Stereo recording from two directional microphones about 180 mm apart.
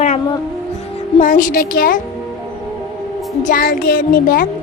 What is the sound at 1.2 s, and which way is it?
Speech, 45° left (ahead or behind).